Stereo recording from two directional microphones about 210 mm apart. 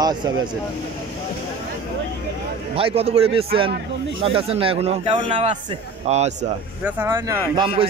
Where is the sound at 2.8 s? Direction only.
25° right (ahead or behind).